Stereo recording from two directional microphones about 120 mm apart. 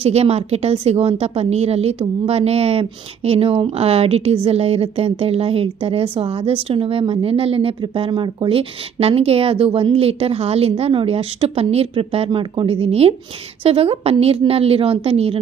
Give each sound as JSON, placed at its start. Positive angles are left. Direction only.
{"t": 0.0, "sound": "a woman's voice", "side_deg": -60}